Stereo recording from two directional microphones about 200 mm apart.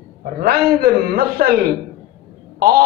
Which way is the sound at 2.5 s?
50° right (ahead or behind).